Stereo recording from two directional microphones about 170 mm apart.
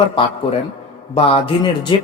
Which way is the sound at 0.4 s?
35° left (ahead or behind).